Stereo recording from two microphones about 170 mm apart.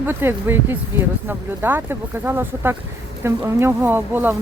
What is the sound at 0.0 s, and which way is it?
Speech, 15° right (ahead or behind).